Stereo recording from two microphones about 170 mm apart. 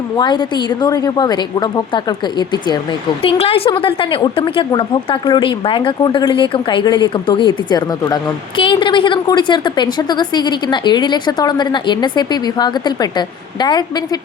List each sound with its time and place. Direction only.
0.2 s a woman's voice: 25° left (ahead or behind)